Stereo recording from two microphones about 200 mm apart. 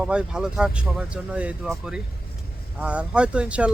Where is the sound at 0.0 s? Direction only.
5° right (ahead or behind).